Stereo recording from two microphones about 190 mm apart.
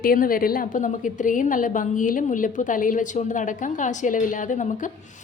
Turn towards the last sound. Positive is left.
turn(degrees=40)  # may be behind; listen again after turning